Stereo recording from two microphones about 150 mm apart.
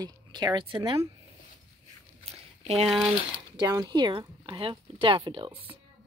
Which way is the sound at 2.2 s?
40° right (ahead or behind).